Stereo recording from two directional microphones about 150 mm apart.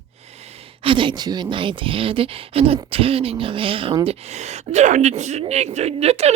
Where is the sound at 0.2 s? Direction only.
45° right (ahead or behind).